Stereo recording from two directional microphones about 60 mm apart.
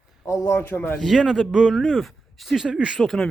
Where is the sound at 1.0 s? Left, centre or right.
Centre.